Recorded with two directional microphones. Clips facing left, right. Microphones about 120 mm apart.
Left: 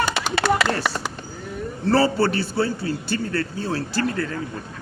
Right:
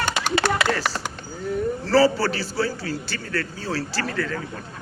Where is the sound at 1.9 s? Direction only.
25° left (ahead or behind).